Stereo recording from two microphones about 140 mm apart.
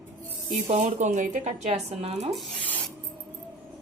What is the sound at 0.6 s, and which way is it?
Speech, 50° right (ahead or behind).